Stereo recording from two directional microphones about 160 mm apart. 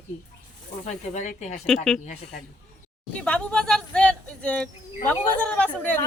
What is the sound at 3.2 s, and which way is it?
A woman's voice, 5° left (ahead or behind).